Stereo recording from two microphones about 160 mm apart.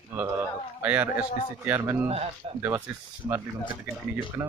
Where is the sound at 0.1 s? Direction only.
10° right (ahead or behind).